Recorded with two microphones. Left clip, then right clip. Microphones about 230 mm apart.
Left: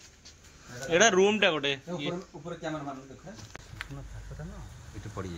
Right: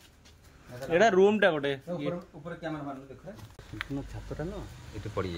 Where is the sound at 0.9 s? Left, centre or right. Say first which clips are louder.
Even; centre.